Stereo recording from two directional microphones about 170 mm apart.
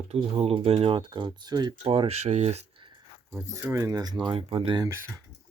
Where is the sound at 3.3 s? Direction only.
15° right (ahead or behind); by 4.8 s 30° right (ahead or behind).